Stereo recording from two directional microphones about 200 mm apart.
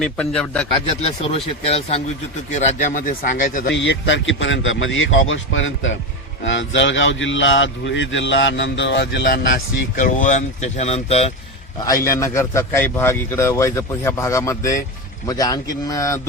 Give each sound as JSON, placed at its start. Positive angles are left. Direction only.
{"t": 0.0, "sound": "speech", "side_deg": 5}
{"t": 0.7, "sound": "speech", "side_deg": 30}
{"t": 3.7, "sound": "speech", "side_deg": 65}
{"t": 9.5, "sound": "speech", "side_deg": 40}
{"t": 11.9, "sound": "a man's voice", "side_deg": 15}